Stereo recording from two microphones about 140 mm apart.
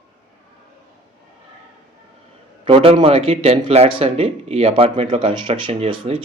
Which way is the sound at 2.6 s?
45° right (ahead or behind).